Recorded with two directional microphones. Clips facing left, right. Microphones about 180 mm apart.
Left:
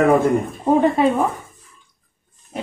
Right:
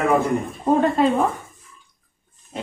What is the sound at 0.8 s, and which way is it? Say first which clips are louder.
Speech: left 2 dB; 10° left (ahead or behind).